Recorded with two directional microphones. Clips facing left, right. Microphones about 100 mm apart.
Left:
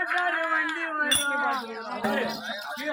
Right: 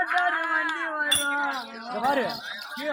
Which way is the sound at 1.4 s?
35° left (ahead or behind).